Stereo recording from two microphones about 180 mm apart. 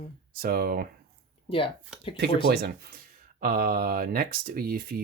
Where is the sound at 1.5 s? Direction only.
30° left (ahead or behind).